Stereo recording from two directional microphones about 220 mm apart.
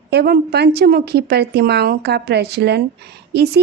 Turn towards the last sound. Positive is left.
turn(degrees=-50)  # may be behind; listen again after turning